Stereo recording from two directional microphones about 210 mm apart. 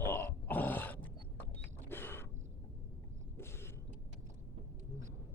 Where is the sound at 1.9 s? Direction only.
10° left (ahead or behind).